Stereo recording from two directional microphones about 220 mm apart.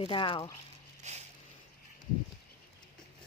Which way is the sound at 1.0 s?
30° right (ahead or behind).